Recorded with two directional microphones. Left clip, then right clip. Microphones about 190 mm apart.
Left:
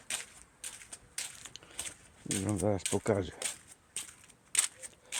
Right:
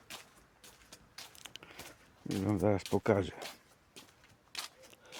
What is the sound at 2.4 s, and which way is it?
Speech, 10° right (ahead or behind).